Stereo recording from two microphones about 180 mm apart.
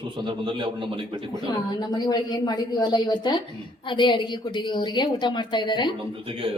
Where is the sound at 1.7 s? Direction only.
25° left (ahead or behind).